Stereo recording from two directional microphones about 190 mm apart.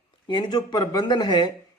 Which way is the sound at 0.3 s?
25° left (ahead or behind).